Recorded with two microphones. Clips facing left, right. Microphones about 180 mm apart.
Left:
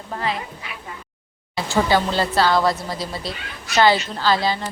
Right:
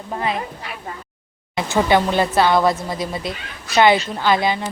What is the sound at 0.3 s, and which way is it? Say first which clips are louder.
Speech: right 4 dB; 50° right (ahead or behind).